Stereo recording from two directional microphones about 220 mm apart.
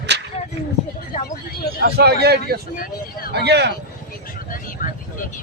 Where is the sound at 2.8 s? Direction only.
40° left (ahead or behind).